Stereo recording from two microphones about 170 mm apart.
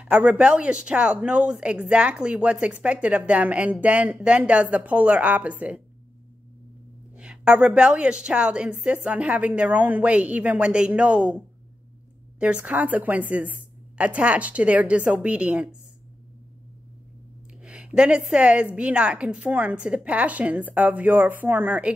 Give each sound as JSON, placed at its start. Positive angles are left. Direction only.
{"t": 0.0, "sound": "speech", "side_deg": -5}
{"t": 7.2, "sound": "speech", "side_deg": -5}
{"t": 17.6, "sound": "speech", "side_deg": -5}